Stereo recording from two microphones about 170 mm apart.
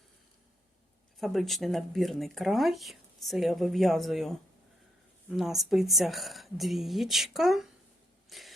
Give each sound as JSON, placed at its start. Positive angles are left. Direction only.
{"t": 1.2, "sound": "speech", "side_deg": 0}
{"t": 5.4, "sound": "speech", "side_deg": 0}
{"t": 8.3, "sound": "a sound", "side_deg": 0}